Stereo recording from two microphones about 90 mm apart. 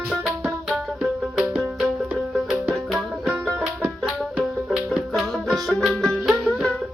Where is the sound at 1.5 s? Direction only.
15° right (ahead or behind).